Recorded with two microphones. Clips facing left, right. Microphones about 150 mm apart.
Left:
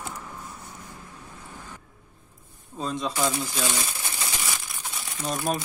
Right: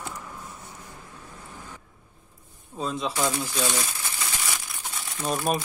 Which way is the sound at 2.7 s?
Centre (ahead or behind).